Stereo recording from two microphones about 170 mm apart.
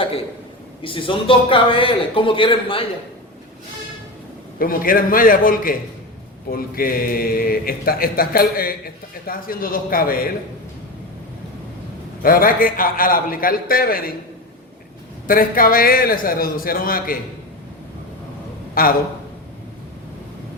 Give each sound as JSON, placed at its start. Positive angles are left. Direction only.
{"t": 0.8, "sound": "a man's voice", "side_deg": 30}
{"t": 4.6, "sound": "a man's voice", "side_deg": 60}
{"t": 12.2, "sound": "a man's voice", "side_deg": 55}
{"t": 15.3, "sound": "a man's voice", "side_deg": 55}
{"t": 18.7, "sound": "a man's voice", "side_deg": 60}